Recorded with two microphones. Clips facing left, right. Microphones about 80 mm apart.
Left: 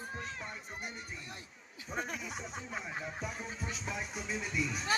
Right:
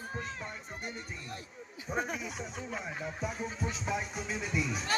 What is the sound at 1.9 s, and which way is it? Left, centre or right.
Speech, centre.